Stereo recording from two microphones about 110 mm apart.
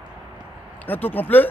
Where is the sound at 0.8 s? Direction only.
15° left (ahead or behind).